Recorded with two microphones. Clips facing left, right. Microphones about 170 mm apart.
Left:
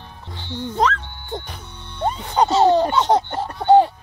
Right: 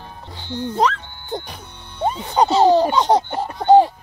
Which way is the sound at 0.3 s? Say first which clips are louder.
Right 2 dB; 10° right (ahead or behind).